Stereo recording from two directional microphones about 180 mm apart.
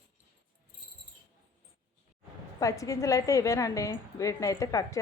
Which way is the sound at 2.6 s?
20° left (ahead or behind).